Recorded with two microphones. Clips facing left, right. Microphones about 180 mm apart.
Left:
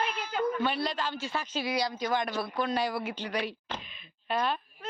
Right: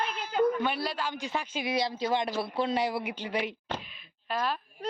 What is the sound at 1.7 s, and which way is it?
Speech, 25° right (ahead or behind).